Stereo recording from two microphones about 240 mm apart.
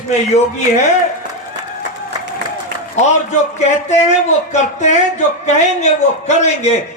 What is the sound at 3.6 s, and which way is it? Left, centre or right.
A man's voice, left.